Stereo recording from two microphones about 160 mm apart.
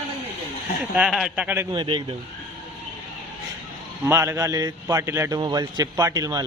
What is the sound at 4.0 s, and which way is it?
A man's voice, 15° right (ahead or behind).